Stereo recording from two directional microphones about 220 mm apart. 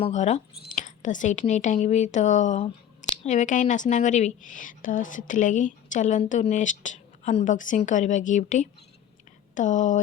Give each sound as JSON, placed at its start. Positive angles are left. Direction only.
{"t": 0.0, "sound": "speech", "side_deg": 30}